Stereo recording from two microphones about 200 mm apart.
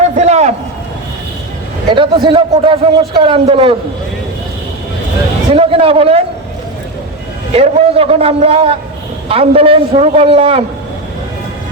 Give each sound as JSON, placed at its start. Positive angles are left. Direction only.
{"t": 0.2, "sound": "a man's voice", "side_deg": -35}
{"t": 2.0, "sound": "a man's voice", "side_deg": -25}
{"t": 5.5, "sound": "a man's voice", "side_deg": -30}
{"t": 7.5, "sound": "a man's voice", "side_deg": -30}